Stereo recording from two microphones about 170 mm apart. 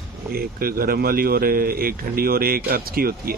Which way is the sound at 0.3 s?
60° right (ahead or behind).